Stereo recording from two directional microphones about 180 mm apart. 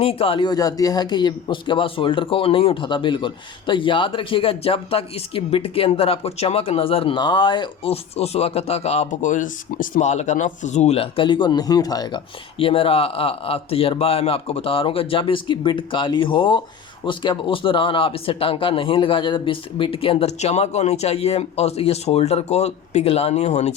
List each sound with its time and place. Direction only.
0.0 s speech: 30° left (ahead or behind)